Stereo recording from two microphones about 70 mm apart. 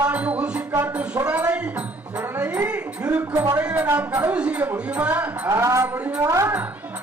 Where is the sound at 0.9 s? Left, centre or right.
Centre.